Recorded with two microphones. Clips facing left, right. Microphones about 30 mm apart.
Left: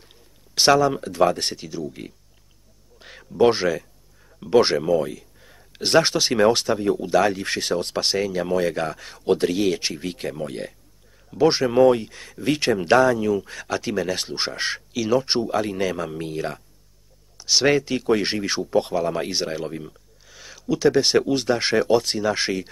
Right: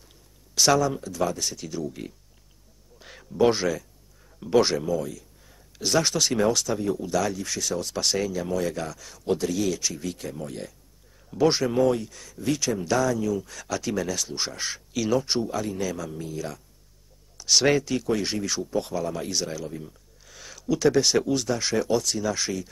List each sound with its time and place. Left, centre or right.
0.6 s speech: left
0.9 s speech: left
1.7 s speech: centre
4.6 s speech: left
11.2 s speech: centre
11.8 s speech: left
14.1 s speech: left
14.9 s speech: centre
15.2 s speech: left
17.4 s speech: centre
18.1 s speech: left
20.2 s a sound: centre
21.1 s speech: left